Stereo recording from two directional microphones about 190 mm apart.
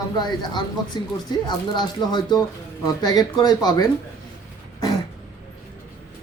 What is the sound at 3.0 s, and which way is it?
Speech, 20° left (ahead or behind).